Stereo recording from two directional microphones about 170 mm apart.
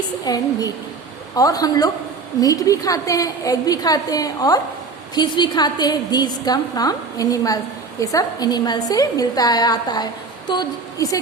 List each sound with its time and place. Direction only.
0.3 s a woman's voice: 25° left (ahead or behind)